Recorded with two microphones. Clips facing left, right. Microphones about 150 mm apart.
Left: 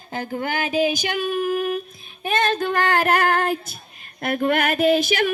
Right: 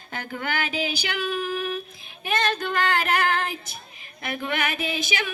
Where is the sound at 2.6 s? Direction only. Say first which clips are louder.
Left 4 dB; 55° left (ahead or behind).